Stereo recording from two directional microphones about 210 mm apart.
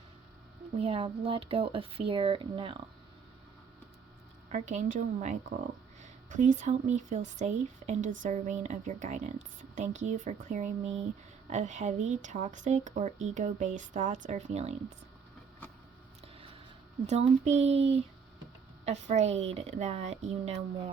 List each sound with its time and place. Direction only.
0.8 s speech: 25° right (ahead or behind)
4.5 s speech: 35° right (ahead or behind)
16.2 s a sound: 25° right (ahead or behind)
17.1 s speech: 30° right (ahead or behind)